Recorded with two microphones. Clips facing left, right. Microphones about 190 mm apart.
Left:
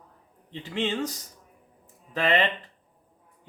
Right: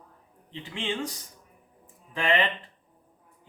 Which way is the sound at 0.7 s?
40° left (ahead or behind).